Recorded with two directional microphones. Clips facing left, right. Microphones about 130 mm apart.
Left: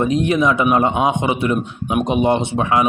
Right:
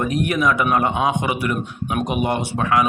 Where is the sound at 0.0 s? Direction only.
25° left (ahead or behind).